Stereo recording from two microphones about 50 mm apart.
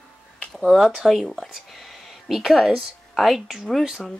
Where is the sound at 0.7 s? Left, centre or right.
Centre.